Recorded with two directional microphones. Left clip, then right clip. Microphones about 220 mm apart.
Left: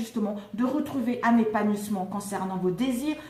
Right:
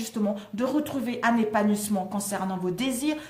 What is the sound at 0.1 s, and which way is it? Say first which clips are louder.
A woman's voice: right 2 dB; 45° right (ahead or behind).